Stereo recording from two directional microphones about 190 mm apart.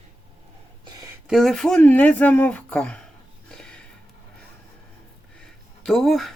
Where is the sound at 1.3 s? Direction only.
Centre (ahead or behind).